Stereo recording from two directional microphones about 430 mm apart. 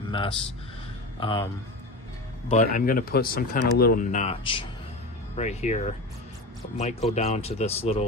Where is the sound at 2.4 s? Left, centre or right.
Centre.